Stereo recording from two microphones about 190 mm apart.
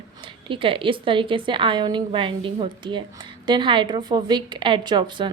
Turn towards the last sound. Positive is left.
turn(degrees=-25)  # may be behind; listen again after turning